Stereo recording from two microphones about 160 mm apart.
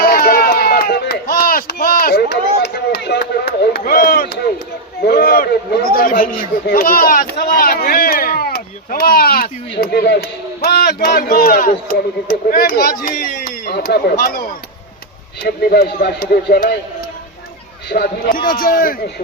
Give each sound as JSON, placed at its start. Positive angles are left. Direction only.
{"t": 0.0, "sound": "run", "side_deg": 65}
{"t": 5.0, "sound": "a sound", "side_deg": 70}
{"t": 5.9, "sound": "a sound", "side_deg": 60}
{"t": 10.6, "sound": "a man's voice", "side_deg": 75}
{"t": 15.4, "sound": "a man's voice", "side_deg": 75}
{"t": 17.8, "sound": "a man's voice", "side_deg": 70}